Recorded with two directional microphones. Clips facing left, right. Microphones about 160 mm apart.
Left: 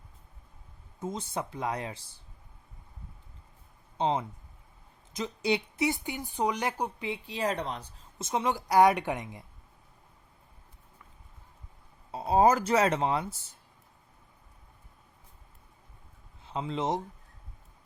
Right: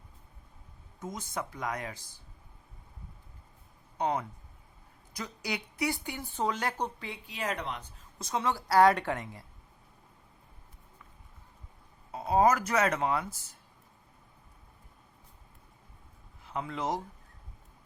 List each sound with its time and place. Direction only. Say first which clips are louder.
0.9 s a woman's voice: left 3 dB; 30° left (ahead or behind)
3.9 s a woman's voice: left 2 dB; 25° left (ahead or behind)
7.1 s a woman's voice: left 5 dB; 30° left (ahead or behind)
12.1 s a woman's voice: left 2 dB; 30° left (ahead or behind)
16.4 s speech: left 3 dB; 25° left (ahead or behind)